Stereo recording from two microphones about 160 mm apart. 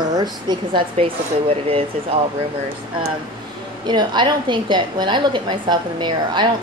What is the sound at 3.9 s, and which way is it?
A woman's voice, 30° right (ahead or behind).